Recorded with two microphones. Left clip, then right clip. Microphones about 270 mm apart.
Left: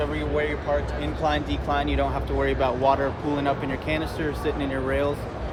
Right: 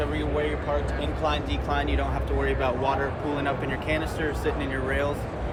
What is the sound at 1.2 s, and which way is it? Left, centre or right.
Speech, left.